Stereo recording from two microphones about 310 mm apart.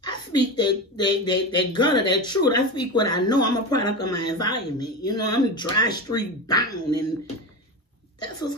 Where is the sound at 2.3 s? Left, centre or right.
Left.